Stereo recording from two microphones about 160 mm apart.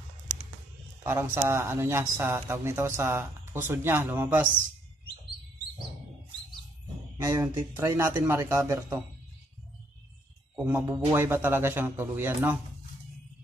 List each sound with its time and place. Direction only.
1.0 s a man's voice: 15° right (ahead or behind)
7.2 s a man's voice: 20° right (ahead or behind)
10.6 s a man's voice: 15° right (ahead or behind)